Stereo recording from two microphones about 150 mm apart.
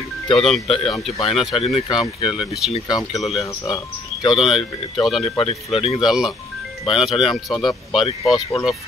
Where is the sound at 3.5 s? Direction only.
25° left (ahead or behind).